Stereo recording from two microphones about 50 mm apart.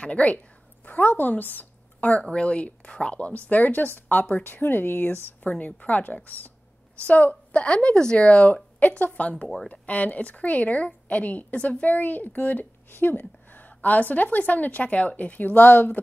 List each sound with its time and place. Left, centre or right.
0.0 s speech: left
0.8 s a woman's voice: left